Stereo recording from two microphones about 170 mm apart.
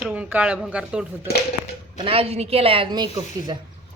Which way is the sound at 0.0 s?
10° right (ahead or behind).